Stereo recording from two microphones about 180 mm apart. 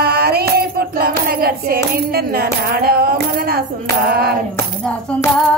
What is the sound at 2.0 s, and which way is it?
Music, 55° right (ahead or behind).